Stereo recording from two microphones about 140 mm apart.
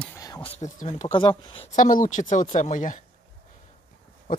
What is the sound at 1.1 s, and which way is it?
Speech, 35° left (ahead or behind).